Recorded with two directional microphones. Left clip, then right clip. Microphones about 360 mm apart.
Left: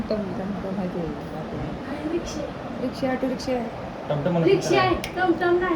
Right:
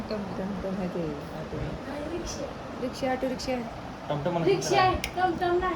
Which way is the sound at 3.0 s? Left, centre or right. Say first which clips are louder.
Left 3 dB; centre.